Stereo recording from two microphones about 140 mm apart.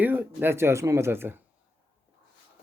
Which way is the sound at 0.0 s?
10° right (ahead or behind).